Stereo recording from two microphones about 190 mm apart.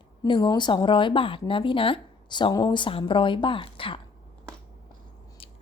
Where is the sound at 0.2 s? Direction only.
25° left (ahead or behind).